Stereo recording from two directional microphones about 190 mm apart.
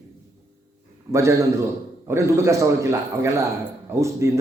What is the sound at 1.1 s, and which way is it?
A man's voice, 15° right (ahead or behind).